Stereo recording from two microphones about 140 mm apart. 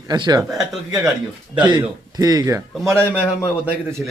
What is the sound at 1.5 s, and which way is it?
A man's voice, 35° right (ahead or behind).